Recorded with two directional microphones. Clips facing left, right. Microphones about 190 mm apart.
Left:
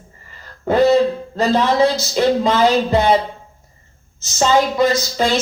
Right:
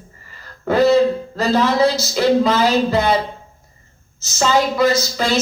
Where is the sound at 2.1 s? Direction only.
20° left (ahead or behind).